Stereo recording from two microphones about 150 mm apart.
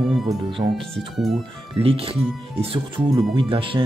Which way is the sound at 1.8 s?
40° right (ahead or behind).